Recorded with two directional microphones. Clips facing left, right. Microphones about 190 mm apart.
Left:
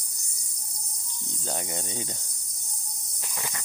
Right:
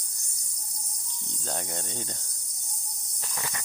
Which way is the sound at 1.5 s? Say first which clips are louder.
Left 1 dB; 5° left (ahead or behind).